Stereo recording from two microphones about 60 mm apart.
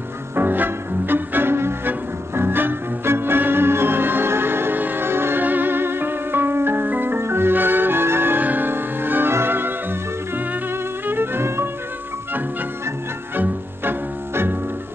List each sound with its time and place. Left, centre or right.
0.4 s music: right
13.4 s music: right